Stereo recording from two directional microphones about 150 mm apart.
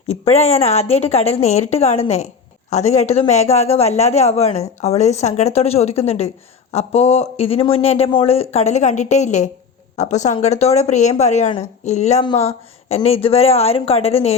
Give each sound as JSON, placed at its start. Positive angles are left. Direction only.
{"t": 0.1, "sound": "a woman's voice", "side_deg": 45}